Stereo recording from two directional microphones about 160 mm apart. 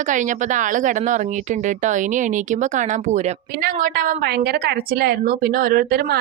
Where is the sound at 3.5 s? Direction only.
65° right (ahead or behind).